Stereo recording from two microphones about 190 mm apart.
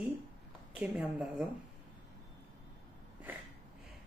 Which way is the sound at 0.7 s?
5° right (ahead or behind).